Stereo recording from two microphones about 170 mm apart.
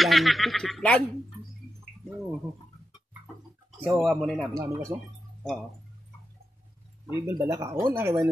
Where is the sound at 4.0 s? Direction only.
Centre (ahead or behind).